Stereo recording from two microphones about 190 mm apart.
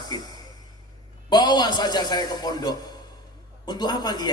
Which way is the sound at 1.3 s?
20° left (ahead or behind).